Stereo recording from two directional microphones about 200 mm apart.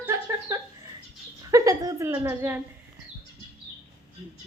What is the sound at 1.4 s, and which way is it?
A woman's voice, 15° right (ahead or behind).